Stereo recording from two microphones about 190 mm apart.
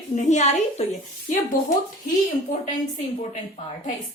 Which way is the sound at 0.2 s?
40° left (ahead or behind).